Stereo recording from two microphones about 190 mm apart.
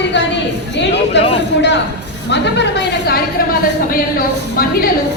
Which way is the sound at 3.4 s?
50° left (ahead or behind).